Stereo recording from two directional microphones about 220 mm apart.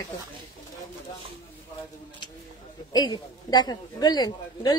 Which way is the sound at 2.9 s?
20° left (ahead or behind).